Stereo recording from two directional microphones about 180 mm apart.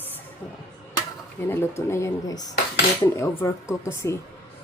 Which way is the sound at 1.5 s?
15° left (ahead or behind).